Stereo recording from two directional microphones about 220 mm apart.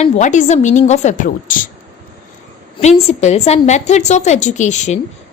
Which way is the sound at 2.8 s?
30° left (ahead or behind).